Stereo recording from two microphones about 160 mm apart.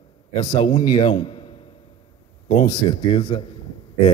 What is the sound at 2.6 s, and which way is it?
Speech, 30° left (ahead or behind).